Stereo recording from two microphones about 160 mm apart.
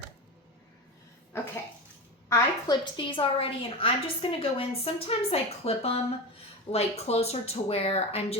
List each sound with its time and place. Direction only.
2.3 s a woman's voice: 25° left (ahead or behind)